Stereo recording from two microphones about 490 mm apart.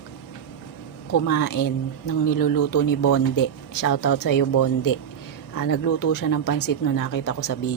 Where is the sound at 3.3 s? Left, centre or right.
Left.